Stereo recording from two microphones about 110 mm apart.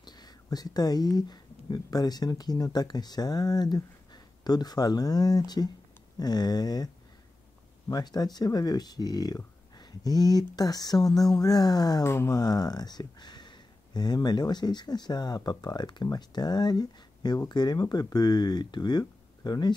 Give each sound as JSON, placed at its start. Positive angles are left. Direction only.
{"t": 0.0, "sound": "speech", "side_deg": 40}
{"t": 7.9, "sound": "speech", "side_deg": 35}
{"t": 12.0, "sound": "speech", "side_deg": 25}